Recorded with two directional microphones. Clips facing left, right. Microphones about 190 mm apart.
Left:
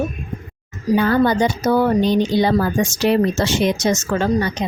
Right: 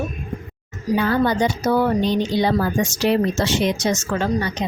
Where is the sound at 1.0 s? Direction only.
45° left (ahead or behind).